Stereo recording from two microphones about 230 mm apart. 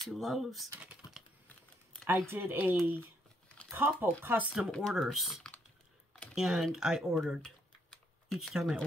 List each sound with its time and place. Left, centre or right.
0.1 s speech: centre
2.0 s speech: centre
4.5 s speech: centre